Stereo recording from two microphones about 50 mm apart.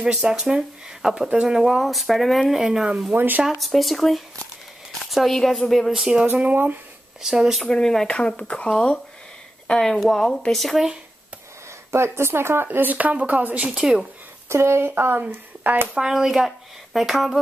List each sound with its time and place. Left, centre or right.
0.0 s speech: centre
1.6 s speech: centre
2.6 s speech: centre
3.2 s speech: right
3.4 s speech: centre
6.3 s speech: right
7.2 s speech: centre
7.6 s speech: centre
8.1 s speech: centre
11.9 s speech: right
12.9 s speech: right
14.5 s speech: right
14.9 s speech: right
15.9 s speech: centre